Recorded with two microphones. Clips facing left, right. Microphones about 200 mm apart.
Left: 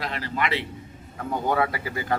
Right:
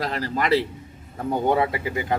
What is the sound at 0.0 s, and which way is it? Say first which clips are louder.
Speech: right 3 dB; 40° right (ahead or behind).